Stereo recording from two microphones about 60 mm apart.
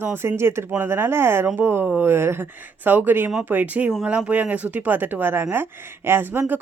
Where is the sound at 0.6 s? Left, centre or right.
Right.